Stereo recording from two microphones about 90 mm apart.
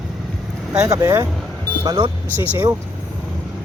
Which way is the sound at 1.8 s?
50° right (ahead or behind).